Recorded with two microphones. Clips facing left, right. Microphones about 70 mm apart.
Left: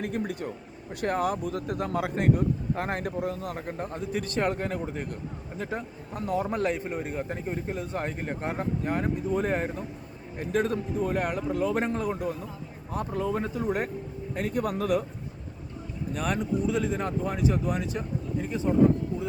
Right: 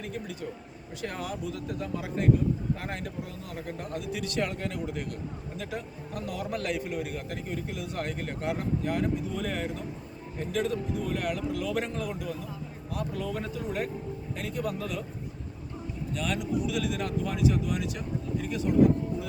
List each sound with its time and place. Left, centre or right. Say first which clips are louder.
0.0 s a man's voice: left 5 dB; left
3.7 s a man's voice: even; left
13.7 s a man's voice: left 3 dB; left
16.1 s a man's voice: left 2 dB; left